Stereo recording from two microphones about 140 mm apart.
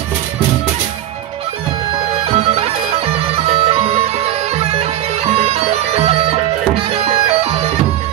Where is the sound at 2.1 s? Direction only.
45° right (ahead or behind).